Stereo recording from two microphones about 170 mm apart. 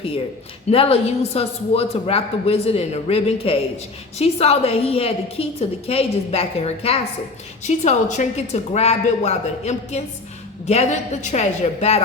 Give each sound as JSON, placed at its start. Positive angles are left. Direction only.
{"t": 0.7, "sound": "a woman's voice", "side_deg": 35}